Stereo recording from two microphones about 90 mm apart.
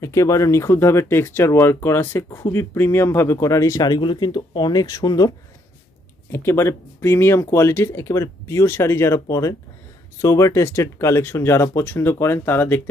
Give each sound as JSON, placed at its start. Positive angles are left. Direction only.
{"t": 0.0, "sound": "speech", "side_deg": 35}
{"t": 2.2, "sound": "speech", "side_deg": 45}
{"t": 2.5, "sound": "speech", "side_deg": 30}
{"t": 3.8, "sound": "speech", "side_deg": 60}
{"t": 6.3, "sound": "speech", "side_deg": 30}